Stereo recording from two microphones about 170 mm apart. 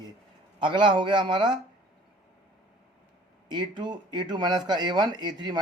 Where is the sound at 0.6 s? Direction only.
30° right (ahead or behind).